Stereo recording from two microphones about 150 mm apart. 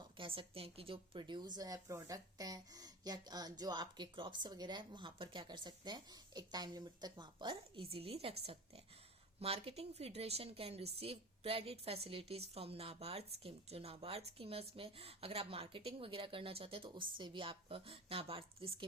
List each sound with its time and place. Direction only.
0.0 s a woman's voice: 35° right (ahead or behind)